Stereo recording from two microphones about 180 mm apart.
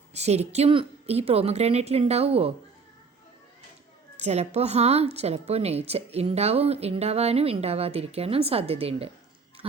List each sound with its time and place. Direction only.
0.1 s a woman's voice: 40° right (ahead or behind)
4.2 s a woman's voice: 35° right (ahead or behind)